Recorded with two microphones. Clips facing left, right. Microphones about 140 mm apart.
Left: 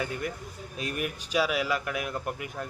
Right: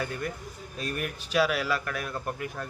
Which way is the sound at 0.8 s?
20° left (ahead or behind).